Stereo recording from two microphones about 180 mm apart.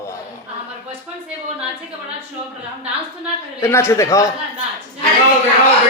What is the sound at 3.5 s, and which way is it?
Speech, 15° left (ahead or behind).